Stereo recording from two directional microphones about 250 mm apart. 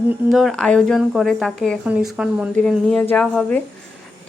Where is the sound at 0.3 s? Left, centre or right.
Centre.